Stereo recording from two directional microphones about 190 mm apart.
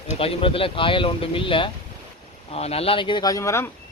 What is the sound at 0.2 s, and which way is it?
Speech, 30° left (ahead or behind).